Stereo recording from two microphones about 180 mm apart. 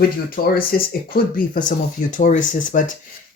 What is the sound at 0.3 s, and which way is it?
Speech, 55° left (ahead or behind).